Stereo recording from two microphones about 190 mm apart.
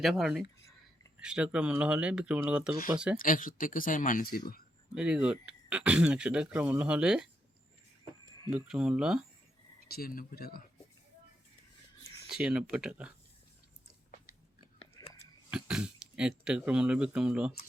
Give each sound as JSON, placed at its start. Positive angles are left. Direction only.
{"t": 0.0, "sound": "speech", "side_deg": 0}
{"t": 3.2, "sound": "speech", "side_deg": 45}
{"t": 4.9, "sound": "speech", "side_deg": -5}
{"t": 8.4, "sound": "speech", "side_deg": -5}
{"t": 9.9, "sound": "speech", "side_deg": 55}
{"t": 12.3, "sound": "speech", "side_deg": -5}
{"t": 15.4, "sound": "speech", "side_deg": -5}